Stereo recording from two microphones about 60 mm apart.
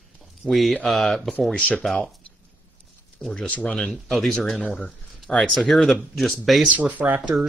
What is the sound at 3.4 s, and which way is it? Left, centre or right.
Speech, left.